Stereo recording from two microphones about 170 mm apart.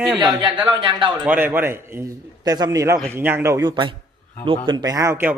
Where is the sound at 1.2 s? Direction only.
10° right (ahead or behind).